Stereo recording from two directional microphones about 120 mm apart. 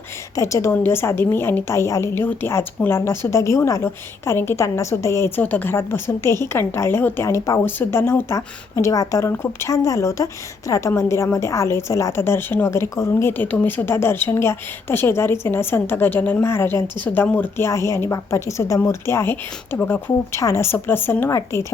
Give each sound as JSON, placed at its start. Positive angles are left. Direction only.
{"t": 0.3, "sound": "a woman's voice", "side_deg": 25}